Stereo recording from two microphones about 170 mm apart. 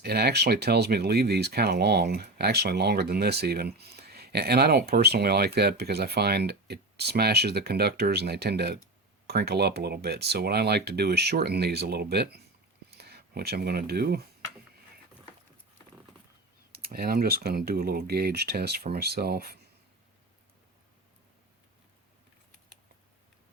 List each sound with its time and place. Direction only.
0.0 s speech: 70° right (ahead or behind)
16.7 s speech: 65° right (ahead or behind)